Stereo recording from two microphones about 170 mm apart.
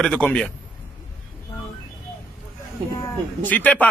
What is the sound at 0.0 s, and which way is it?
Speech, 5° left (ahead or behind).